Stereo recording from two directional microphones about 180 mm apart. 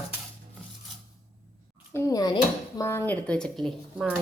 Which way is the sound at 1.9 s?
20° left (ahead or behind).